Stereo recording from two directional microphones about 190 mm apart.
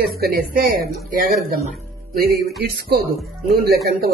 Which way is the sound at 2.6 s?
55° right (ahead or behind).